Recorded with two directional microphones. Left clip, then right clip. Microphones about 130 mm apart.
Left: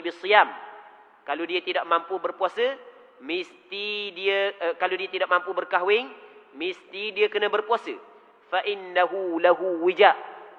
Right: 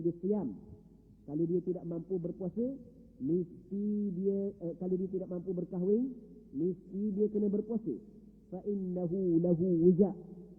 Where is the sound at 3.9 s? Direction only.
15° right (ahead or behind).